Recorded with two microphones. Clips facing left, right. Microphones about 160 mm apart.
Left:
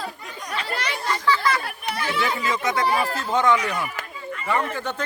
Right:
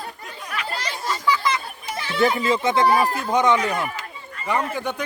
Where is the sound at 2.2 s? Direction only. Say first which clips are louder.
Right 8 dB; 30° right (ahead or behind).